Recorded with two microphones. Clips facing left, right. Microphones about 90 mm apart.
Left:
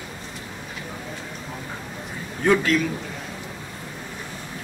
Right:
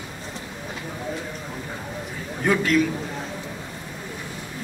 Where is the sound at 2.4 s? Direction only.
5° right (ahead or behind).